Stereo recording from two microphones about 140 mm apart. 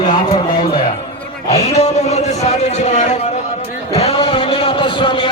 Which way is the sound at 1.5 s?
50° left (ahead or behind).